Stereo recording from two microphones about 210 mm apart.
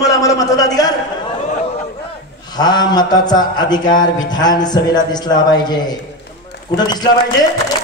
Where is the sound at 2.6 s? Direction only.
20° left (ahead or behind).